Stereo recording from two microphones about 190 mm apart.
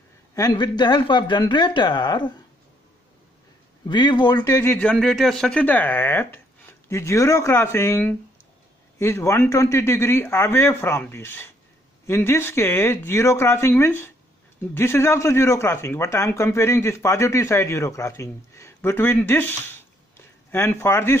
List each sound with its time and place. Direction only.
0.3 s speech: 20° left (ahead or behind)
3.8 s speech: 25° left (ahead or behind)